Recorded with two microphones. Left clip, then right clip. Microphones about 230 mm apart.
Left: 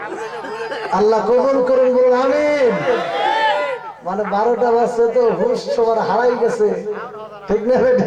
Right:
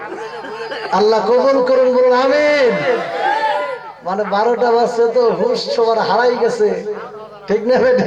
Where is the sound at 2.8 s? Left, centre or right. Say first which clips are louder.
Right 1 dB; centre.